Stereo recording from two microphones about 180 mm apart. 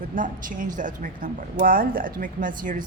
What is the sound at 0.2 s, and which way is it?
A woman's voice, 50° right (ahead or behind).